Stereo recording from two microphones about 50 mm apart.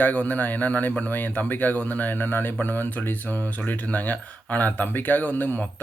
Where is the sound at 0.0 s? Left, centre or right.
Left.